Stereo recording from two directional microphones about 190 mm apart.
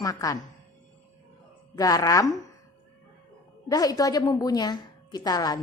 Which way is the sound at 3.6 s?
20° left (ahead or behind).